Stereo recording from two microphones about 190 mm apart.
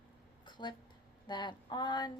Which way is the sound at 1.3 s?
25° left (ahead or behind).